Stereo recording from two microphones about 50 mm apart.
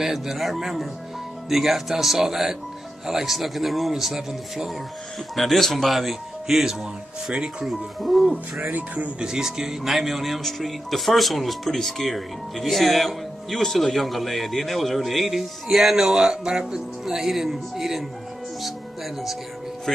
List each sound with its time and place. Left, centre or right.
0.0 s a man's voice: centre
8.7 s speech: right
9.2 s speech: centre